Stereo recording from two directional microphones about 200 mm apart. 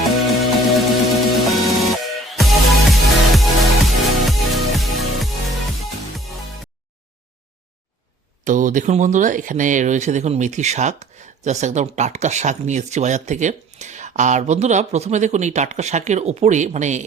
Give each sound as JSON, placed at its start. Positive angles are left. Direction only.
{"t": 0.0, "sound": "music", "side_deg": 0}
{"t": 8.4, "sound": "speech", "side_deg": -40}